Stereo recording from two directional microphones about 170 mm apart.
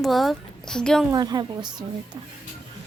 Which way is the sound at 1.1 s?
25° right (ahead or behind).